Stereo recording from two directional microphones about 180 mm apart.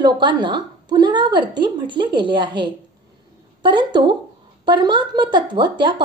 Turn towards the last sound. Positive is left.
turn(degrees=-25)  # may be behind; listen again after turning